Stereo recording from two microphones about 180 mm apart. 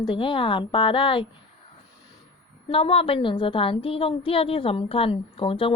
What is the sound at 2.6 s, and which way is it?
A woman's voice, 30° left (ahead or behind).